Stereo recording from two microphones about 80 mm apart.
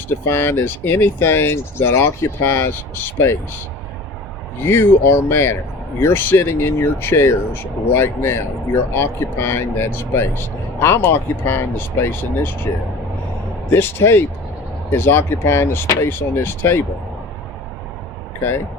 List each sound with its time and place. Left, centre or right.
0.3 s speech: left
4.6 s speech: left
12.7 s speech: left
13.7 s speech: left